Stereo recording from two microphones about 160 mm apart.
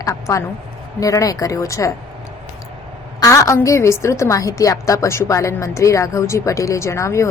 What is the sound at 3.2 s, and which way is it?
A woman's voice, 20° left (ahead or behind).